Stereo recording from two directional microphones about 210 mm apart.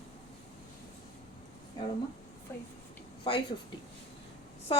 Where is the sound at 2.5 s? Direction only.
10° left (ahead or behind).